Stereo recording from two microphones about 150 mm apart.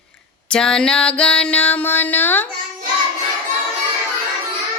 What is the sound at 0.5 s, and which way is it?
Music, 5° left (ahead or behind).